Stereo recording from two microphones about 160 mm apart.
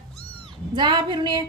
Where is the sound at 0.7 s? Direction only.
30° right (ahead or behind).